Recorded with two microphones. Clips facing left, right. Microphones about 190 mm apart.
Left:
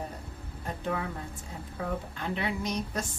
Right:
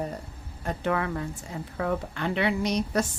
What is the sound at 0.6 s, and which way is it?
A woman's voice, 75° right (ahead or behind).